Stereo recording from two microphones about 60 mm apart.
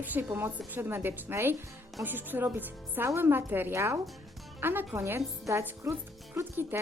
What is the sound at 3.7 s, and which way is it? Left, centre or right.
Speech, right.